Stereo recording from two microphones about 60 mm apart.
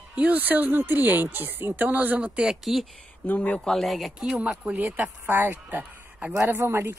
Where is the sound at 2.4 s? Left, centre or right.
Centre.